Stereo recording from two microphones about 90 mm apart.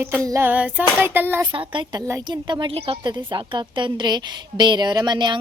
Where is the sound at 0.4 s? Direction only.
15° right (ahead or behind).